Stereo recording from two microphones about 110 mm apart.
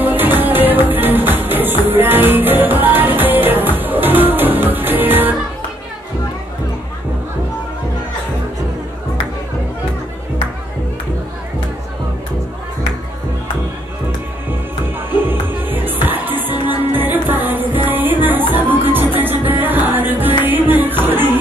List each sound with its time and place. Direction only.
0.0 s music: 15° right (ahead or behind)
15.2 s music: 20° right (ahead or behind)